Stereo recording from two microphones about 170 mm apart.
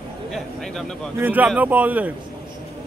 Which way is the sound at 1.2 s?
10° right (ahead or behind).